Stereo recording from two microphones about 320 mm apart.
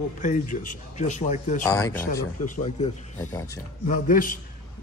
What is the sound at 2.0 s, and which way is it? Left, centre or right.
Speech, left.